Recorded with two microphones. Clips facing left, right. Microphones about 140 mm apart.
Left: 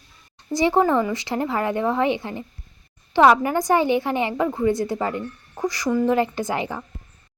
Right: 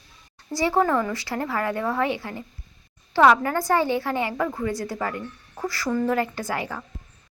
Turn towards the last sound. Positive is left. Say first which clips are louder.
# left 4 dB
turn(degrees=20)  # may be behind; listen again after turning